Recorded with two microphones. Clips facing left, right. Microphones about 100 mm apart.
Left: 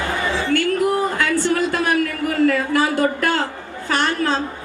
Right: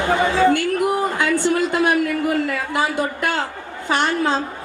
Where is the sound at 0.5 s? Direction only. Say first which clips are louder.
Left 1 dB; 20° right (ahead or behind).